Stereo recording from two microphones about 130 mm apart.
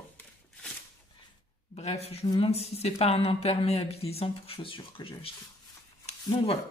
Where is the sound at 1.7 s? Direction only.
55° left (ahead or behind).